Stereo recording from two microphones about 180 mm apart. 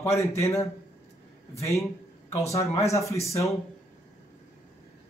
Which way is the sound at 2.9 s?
15° left (ahead or behind).